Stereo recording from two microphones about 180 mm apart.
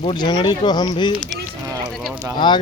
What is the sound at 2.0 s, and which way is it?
Speech, centre (ahead or behind).